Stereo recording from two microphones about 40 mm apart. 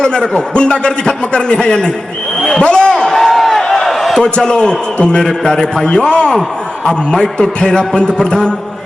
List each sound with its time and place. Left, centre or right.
0.0 s a man's voice: left
2.4 s a man's voice: centre
2.6 s a sound: left; by 4.2 s centre
4.2 s a man's voice: left